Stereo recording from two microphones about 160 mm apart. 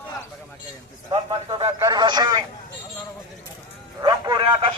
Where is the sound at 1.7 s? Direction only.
25° right (ahead or behind).